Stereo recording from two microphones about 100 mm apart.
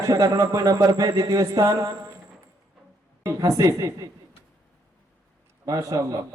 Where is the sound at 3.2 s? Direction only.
30° right (ahead or behind).